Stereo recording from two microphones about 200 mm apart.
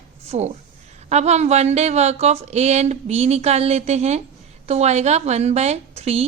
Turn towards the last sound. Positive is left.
turn(degrees=-30)  # may be behind; listen again after turning